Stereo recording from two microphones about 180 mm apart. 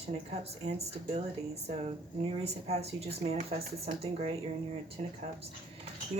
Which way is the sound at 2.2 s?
35° right (ahead or behind).